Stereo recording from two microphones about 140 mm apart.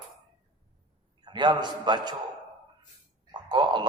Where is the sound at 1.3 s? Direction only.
30° right (ahead or behind).